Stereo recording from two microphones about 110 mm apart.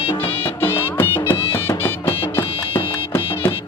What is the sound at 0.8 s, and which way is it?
Music, 20° left (ahead or behind).